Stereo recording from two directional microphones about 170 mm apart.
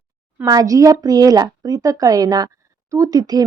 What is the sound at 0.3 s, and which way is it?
A woman's voice, 20° right (ahead or behind).